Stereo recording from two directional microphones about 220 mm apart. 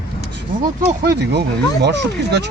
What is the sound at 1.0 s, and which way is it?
Speech, 50° right (ahead or behind).